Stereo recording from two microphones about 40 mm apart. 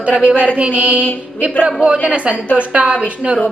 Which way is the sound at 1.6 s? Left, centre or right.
Right.